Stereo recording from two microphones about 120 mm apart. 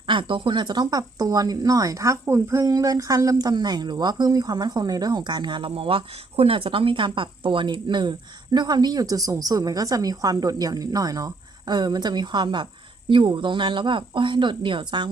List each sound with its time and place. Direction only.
0.1 s speech: 45° right (ahead or behind)